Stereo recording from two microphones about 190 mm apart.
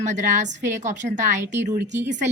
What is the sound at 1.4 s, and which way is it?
Speech, 10° right (ahead or behind).